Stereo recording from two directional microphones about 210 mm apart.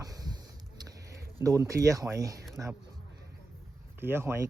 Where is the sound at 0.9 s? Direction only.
15° right (ahead or behind).